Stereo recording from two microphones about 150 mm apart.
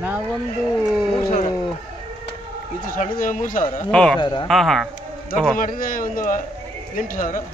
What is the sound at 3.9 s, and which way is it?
Speech, 5° left (ahead or behind).